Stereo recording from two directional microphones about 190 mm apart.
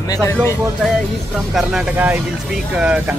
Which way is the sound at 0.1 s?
10° left (ahead or behind).